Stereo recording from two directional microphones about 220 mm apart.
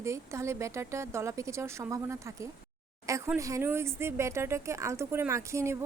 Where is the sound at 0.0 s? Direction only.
15° right (ahead or behind).